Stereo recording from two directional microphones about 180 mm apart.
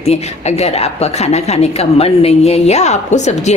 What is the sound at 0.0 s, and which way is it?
A woman's voice, 35° left (ahead or behind).